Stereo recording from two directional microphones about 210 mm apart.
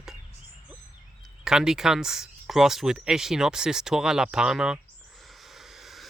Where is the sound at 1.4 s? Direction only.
Centre (ahead or behind).